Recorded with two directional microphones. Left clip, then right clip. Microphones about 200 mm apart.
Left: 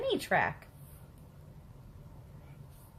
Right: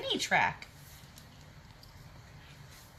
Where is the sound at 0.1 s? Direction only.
65° left (ahead or behind).